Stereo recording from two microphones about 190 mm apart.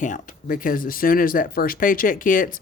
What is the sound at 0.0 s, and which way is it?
Speech, 45° left (ahead or behind).